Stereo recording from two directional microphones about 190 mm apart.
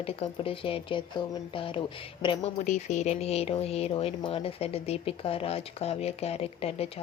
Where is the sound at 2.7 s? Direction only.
40° left (ahead or behind).